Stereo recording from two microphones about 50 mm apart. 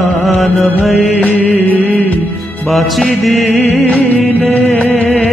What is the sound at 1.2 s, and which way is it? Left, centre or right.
Music, left.